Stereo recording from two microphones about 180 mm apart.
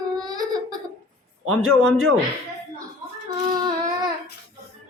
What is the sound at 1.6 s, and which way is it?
Speech, centre (ahead or behind).